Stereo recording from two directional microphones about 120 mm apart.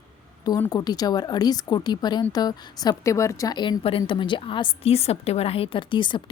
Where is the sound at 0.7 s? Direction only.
35° left (ahead or behind).